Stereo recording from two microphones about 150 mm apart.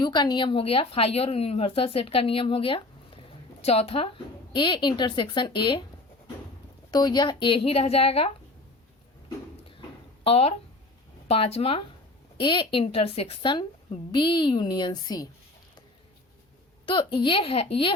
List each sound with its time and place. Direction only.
0.0 s a woman's voice: 30° left (ahead or behind)
6.9 s a woman's voice: 30° left (ahead or behind)
10.2 s a woman's voice: 45° left (ahead or behind); by 15.3 s 25° left (ahead or behind)
16.8 s a woman's voice: 30° left (ahead or behind)